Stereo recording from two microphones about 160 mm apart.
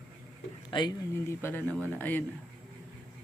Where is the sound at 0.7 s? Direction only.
30° left (ahead or behind).